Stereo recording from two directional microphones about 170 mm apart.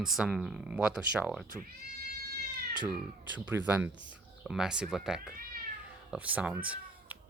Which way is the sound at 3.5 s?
10° right (ahead or behind).